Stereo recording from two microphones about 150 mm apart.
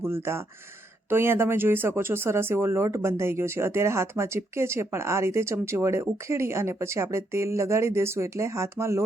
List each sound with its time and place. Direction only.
0.0 s speech: 15° right (ahead or behind)